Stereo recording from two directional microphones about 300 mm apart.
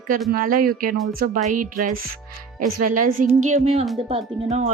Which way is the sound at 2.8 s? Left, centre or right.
Right.